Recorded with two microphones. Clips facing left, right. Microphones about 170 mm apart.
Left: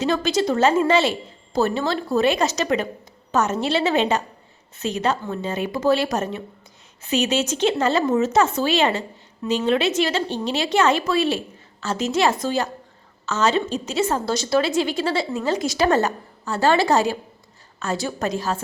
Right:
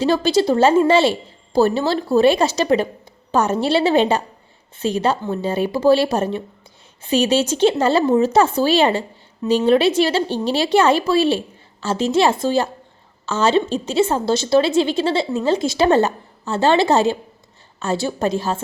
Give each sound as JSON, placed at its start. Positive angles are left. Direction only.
{"t": 0.0, "sound": "a woman's voice", "side_deg": -30}